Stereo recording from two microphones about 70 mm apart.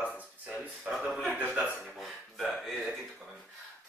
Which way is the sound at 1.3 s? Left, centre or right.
Right.